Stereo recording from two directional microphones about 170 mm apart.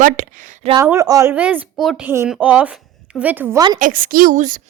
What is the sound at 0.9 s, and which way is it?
A woman's voice, 20° right (ahead or behind).